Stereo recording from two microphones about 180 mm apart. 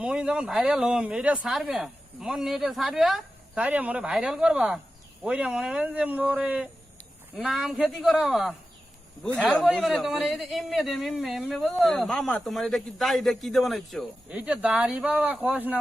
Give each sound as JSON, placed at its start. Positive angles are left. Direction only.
{"t": 0.0, "sound": "a man's voice", "side_deg": -5}